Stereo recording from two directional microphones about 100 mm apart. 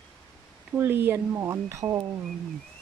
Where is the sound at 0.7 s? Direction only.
20° right (ahead or behind).